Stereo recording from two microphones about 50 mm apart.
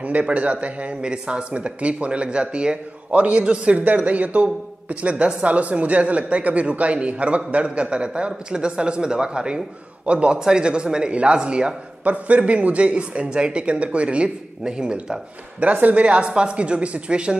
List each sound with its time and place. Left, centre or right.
0.0 s a woman's voice: right
12.0 s speech: right
15.6 s speech: right